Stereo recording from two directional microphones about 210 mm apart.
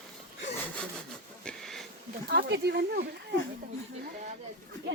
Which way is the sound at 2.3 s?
50° right (ahead or behind).